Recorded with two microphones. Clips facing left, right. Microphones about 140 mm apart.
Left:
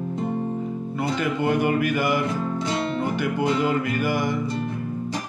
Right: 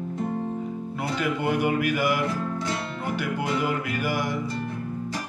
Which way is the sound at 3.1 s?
5° right (ahead or behind).